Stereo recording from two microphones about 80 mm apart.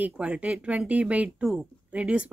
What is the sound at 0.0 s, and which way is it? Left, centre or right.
A woman's voice, centre.